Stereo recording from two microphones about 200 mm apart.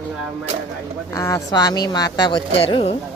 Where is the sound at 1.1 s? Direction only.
15° left (ahead or behind).